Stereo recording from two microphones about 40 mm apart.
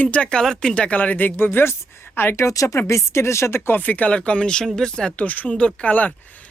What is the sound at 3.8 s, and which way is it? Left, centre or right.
Speech, left.